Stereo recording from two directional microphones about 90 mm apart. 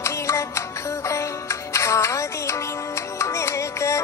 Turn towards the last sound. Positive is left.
turn(degrees=35)  # may be behind; listen again after turning